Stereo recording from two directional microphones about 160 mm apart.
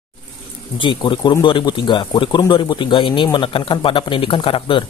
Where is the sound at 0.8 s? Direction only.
30° left (ahead or behind).